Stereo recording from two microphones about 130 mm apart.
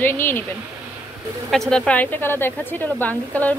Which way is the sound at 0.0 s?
15° left (ahead or behind).